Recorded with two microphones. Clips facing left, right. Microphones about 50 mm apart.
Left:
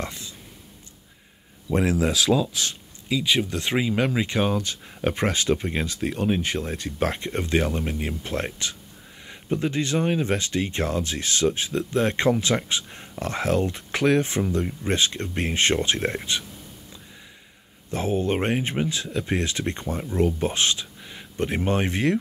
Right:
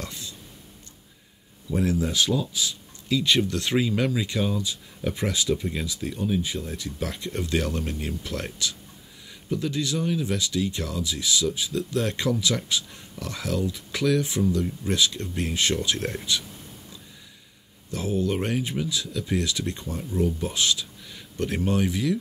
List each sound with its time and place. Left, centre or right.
0.0 s a sound: left
1.7 s speech: left
3.1 s speech: centre; by 4.5 s left
4.5 s speech: left
6.1 s speech: left
6.7 s speech: left
11.9 s speech: left
17.9 s speech: left